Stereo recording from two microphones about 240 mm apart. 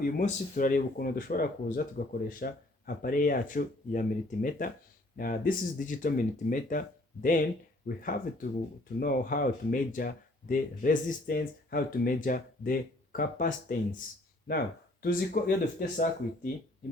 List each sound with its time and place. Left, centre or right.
0.0 s speech: left